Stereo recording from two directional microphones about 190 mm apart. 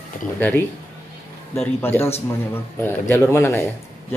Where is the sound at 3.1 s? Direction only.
10° left (ahead or behind).